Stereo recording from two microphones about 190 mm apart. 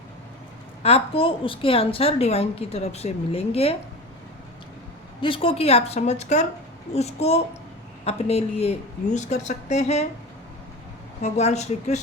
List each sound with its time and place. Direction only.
0.8 s a woman's voice: 30° left (ahead or behind)
5.2 s a woman's voice: 30° left (ahead or behind)
11.2 s a woman's voice: 35° left (ahead or behind)